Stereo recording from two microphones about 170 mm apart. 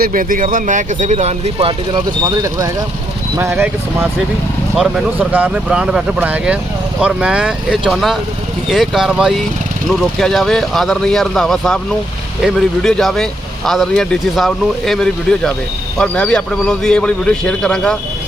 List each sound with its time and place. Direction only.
0.0 s speech: 55° right (ahead or behind); by 2.0 s 35° right (ahead or behind)
2.2 s a man's voice: 20° right (ahead or behind); by 17.9 s 5° left (ahead or behind)